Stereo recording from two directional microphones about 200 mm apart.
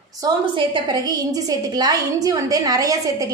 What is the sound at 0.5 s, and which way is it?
A woman's voice, 20° right (ahead or behind).